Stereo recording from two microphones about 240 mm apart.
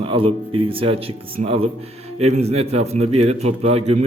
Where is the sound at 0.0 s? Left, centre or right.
Right.